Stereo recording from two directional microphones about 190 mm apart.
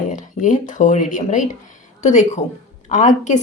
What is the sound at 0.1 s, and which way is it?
A woman's voice, 40° left (ahead or behind).